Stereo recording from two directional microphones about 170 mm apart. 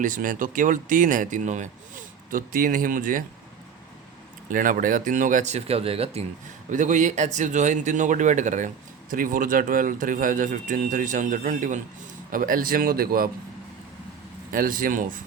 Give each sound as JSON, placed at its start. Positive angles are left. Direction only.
{"t": 0.0, "sound": "a man's voice", "side_deg": -50}
{"t": 4.5, "sound": "a man's voice", "side_deg": -55}
{"t": 6.7, "sound": "a man's voice", "side_deg": -45}
{"t": 14.5, "sound": "speech", "side_deg": -55}